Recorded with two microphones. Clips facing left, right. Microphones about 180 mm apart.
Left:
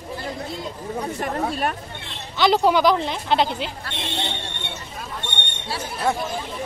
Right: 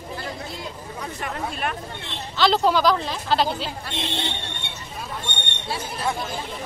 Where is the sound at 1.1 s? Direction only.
40° left (ahead or behind).